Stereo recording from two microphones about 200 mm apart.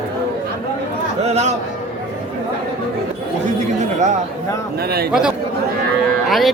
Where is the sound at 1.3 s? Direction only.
35° right (ahead or behind).